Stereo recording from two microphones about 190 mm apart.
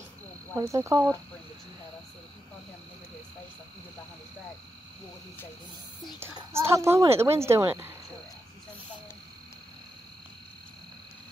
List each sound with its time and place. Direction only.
0.6 s a woman's voice: 15° right (ahead or behind)
6.1 s a woman's voice: 15° right (ahead or behind)